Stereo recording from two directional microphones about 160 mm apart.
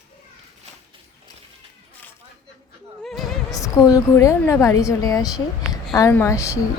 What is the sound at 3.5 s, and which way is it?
A woman's voice, 20° left (ahead or behind).